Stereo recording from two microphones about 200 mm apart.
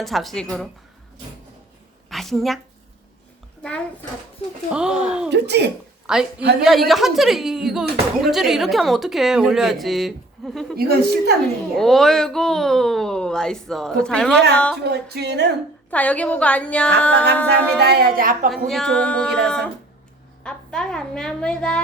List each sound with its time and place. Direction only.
0.0 s speech: centre (ahead or behind)
2.0 s a woman's voice: centre (ahead or behind)
4.7 s speech: 5° right (ahead or behind)
5.3 s music: 55° right (ahead or behind)
6.1 s speech: 5° right (ahead or behind)
10.8 s a woman's voice: 50° right (ahead or behind)
11.8 s speech: centre (ahead or behind)
14.8 s music: 55° right (ahead or behind)
15.9 s a woman's voice: 5° left (ahead or behind)
17.7 s a woman's voice: 55° right (ahead or behind)
18.7 s speech: centre (ahead or behind)